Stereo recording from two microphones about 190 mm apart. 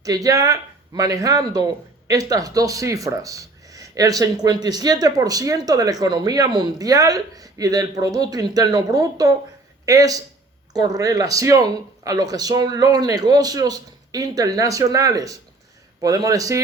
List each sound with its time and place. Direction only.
0.0 s speech: 20° right (ahead or behind)